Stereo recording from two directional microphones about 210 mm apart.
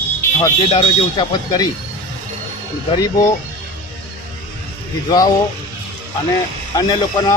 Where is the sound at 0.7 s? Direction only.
25° left (ahead or behind).